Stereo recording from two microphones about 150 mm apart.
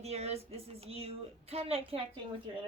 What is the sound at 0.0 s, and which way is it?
Speech, 45° right (ahead or behind).